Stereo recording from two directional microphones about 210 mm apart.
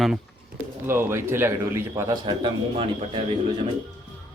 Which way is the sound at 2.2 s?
25° right (ahead or behind).